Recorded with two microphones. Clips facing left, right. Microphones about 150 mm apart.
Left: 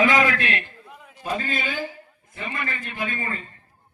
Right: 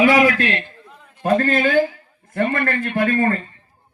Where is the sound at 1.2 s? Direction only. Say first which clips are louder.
Right 11 dB; 55° right (ahead or behind).